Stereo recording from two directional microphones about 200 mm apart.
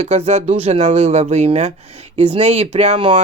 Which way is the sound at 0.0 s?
35° right (ahead or behind).